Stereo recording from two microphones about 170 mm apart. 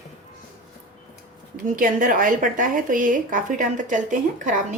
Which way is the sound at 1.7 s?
55° right (ahead or behind).